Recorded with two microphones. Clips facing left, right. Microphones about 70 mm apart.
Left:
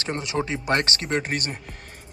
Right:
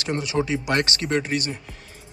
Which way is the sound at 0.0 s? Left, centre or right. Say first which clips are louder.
Right 2 dB; left.